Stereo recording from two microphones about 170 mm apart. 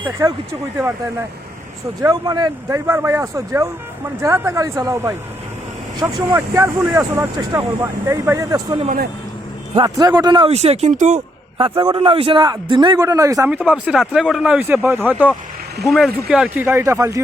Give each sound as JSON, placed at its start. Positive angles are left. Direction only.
{"t": 0.2, "sound": "speech", "side_deg": -15}
{"t": 2.0, "sound": "a man's voice", "side_deg": -20}
{"t": 10.5, "sound": "speech", "side_deg": -40}
{"t": 11.5, "sound": "a man's voice", "side_deg": -30}
{"t": 13.5, "sound": "speech", "side_deg": -5}
{"t": 15.8, "sound": "speech", "side_deg": 0}